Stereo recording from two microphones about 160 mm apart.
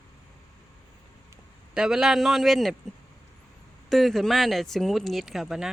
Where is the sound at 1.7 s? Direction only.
5° right (ahead or behind).